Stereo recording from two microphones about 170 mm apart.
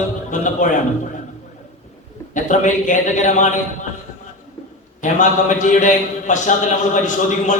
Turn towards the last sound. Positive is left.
turn(degrees=50)  # may be behind; listen again after turning